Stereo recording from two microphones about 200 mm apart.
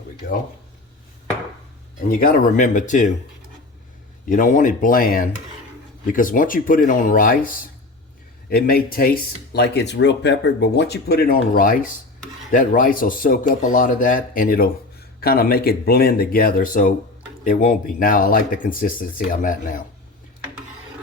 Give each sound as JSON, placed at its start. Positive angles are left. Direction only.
{"t": 2.0, "sound": "speech", "side_deg": 45}
{"t": 4.3, "sound": "speech", "side_deg": 40}